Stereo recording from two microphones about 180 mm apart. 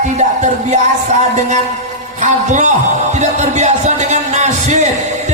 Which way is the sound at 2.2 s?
40° right (ahead or behind).